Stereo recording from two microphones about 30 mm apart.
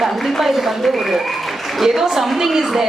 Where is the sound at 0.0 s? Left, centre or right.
Centre.